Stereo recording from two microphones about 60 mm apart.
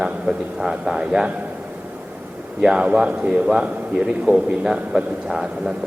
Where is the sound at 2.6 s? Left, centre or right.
Centre.